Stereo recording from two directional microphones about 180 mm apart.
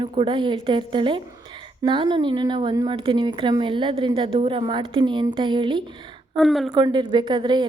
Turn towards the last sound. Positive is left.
turn(degrees=-25)  # may be behind; listen again after turning